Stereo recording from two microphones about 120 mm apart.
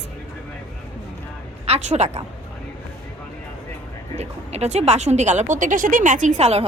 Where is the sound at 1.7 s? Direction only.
65° right (ahead or behind).